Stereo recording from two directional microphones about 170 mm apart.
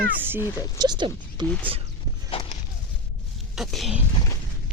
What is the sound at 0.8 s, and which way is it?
Speech, 25° right (ahead or behind).